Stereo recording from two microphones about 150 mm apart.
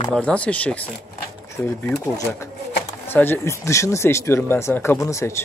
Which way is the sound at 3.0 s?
15° left (ahead or behind).